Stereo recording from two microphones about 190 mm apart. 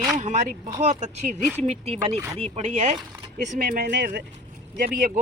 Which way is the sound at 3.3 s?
50° right (ahead or behind).